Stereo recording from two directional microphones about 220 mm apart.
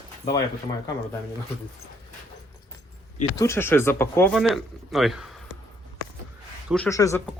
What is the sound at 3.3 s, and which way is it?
Speech, 10° left (ahead or behind).